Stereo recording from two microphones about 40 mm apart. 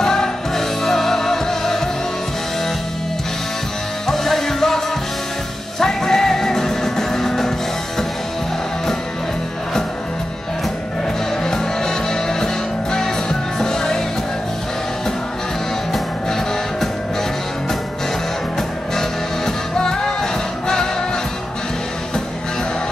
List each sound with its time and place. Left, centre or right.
0.0 s music: centre
4.1 s music: centre
11.4 s music: centre
15.9 s music: centre
18.9 s music: centre